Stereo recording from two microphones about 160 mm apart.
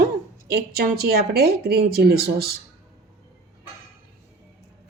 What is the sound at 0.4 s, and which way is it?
Speech, 85° right.